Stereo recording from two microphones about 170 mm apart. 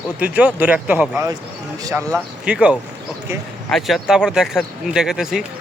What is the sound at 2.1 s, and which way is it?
Speech, 5° right (ahead or behind).